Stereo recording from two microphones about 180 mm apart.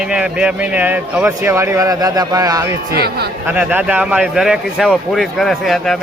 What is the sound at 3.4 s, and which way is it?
A man's voice, 10° right (ahead or behind).